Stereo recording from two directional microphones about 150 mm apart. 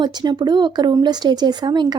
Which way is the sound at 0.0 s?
30° right (ahead or behind).